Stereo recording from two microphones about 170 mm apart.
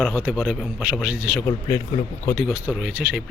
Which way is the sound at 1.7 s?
20° left (ahead or behind).